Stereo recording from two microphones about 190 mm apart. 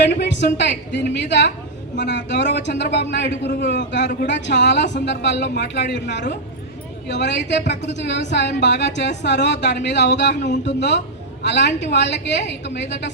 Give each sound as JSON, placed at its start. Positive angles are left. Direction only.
{"t": 0.0, "sound": "a woman's voice", "side_deg": 65}
{"t": 4.1, "sound": "a woman's voice", "side_deg": 50}